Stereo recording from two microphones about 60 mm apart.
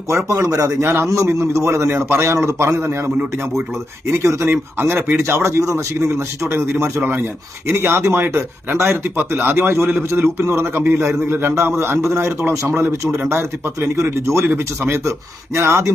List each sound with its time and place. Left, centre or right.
0.3 s speech: right
0.8 s a man's voice: right
4.0 s speech: right
4.4 s speech: right
5.2 s a man's voice: right